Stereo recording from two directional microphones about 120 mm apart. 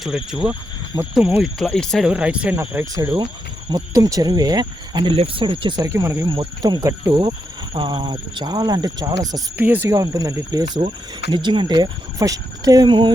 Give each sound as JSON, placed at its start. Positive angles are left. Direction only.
{"t": 0.0, "sound": "speech", "side_deg": -5}
{"t": 2.1, "sound": "speech", "side_deg": -10}
{"t": 2.6, "sound": "speech", "side_deg": -25}
{"t": 5.1, "sound": "speech", "side_deg": -50}
{"t": 5.9, "sound": "speech", "side_deg": -25}
{"t": 6.2, "sound": "speech", "side_deg": -40}
{"t": 9.6, "sound": "speech", "side_deg": -15}
{"t": 9.9, "sound": "speech", "side_deg": -30}
{"t": 12.9, "sound": "speech", "side_deg": -40}